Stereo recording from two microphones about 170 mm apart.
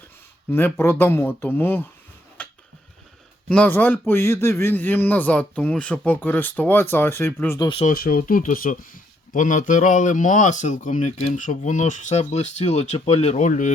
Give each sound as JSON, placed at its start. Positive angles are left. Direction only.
{"t": 0.5, "sound": "speech", "side_deg": 15}
{"t": 2.4, "sound": "a sound", "side_deg": 5}
{"t": 3.5, "sound": "speech", "side_deg": 10}
{"t": 7.9, "sound": "speech", "side_deg": 60}